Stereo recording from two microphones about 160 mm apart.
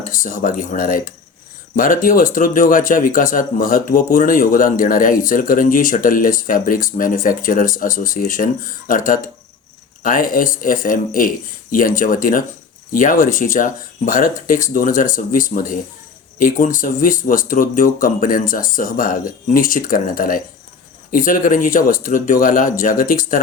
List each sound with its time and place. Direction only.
0.0 s speech: 60° left (ahead or behind)